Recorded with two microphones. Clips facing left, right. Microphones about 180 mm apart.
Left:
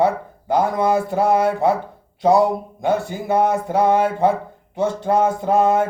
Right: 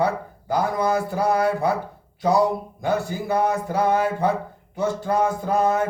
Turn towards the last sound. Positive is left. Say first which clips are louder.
# left 4 dB
turn(degrees=20)  # may be behind; listen again after turning